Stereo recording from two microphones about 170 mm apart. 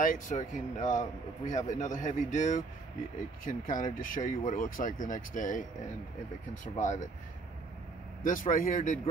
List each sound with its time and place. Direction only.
0.0 s speech: 50° left (ahead or behind)
8.2 s speech: 55° left (ahead or behind)